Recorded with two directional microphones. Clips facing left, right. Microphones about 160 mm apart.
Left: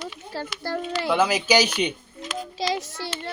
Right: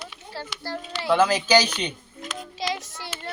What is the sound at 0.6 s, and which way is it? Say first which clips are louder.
Speech: left 6 dB; 50° left (ahead or behind).